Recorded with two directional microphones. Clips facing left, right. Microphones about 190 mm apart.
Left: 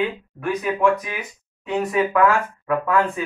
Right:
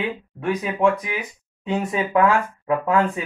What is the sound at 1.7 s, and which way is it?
Speech, 25° right (ahead or behind).